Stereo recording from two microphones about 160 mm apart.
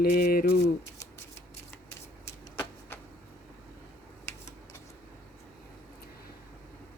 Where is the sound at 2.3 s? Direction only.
15° left (ahead or behind).